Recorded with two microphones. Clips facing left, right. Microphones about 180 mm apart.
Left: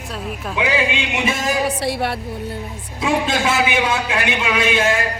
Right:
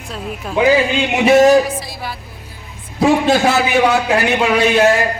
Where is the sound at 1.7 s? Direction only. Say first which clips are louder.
Left 4 dB; 70° left (ahead or behind).